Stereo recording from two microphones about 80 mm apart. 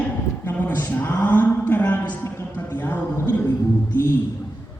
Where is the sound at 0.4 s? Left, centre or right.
Left.